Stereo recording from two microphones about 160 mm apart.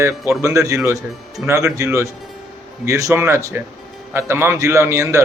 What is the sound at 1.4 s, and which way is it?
Speech, 15° right (ahead or behind).